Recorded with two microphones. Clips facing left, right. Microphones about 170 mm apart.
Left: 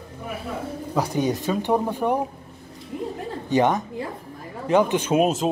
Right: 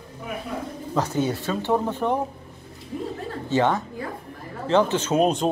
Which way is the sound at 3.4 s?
15° left (ahead or behind).